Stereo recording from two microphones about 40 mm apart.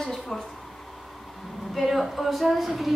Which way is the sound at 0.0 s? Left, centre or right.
Centre.